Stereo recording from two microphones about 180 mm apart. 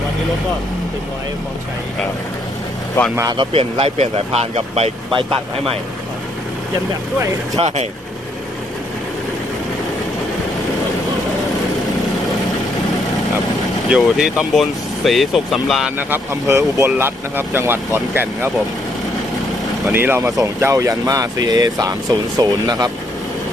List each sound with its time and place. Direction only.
3.2 s speech: 20° right (ahead or behind)
3.5 s speech: 35° right (ahead or behind)
7.6 s speech: 30° right (ahead or behind)
13.9 s speech: 5° right (ahead or behind)
19.9 s speech: 10° right (ahead or behind)